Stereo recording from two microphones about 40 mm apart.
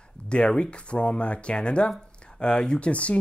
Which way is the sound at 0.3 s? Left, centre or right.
Left.